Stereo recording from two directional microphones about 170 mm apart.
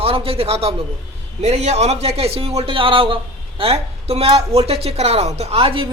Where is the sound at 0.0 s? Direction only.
35° right (ahead or behind).